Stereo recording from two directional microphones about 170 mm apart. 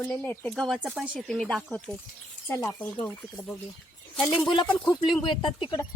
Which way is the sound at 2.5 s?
20° left (ahead or behind).